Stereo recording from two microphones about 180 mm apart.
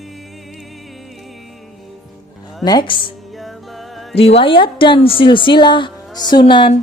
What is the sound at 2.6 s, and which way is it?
Speech, 25° left (ahead or behind).